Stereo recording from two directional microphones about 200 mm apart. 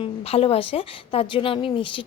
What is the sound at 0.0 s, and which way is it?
Speech, 30° left (ahead or behind).